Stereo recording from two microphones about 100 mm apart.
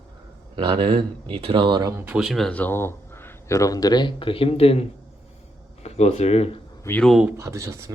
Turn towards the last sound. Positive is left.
turn(degrees=-30)  # may be behind; listen again after turning